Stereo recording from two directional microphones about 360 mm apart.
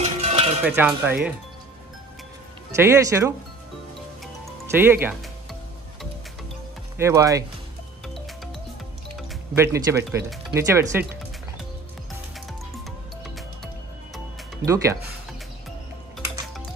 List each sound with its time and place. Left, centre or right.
0.0 s cowbell: centre
0.7 s cowbell: centre
2.7 s speech: centre
4.6 s music: centre
7.0 s speech: centre
9.6 s speech: centre
14.1 s music: centre